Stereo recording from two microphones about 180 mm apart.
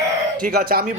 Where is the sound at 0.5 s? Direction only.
55° right (ahead or behind).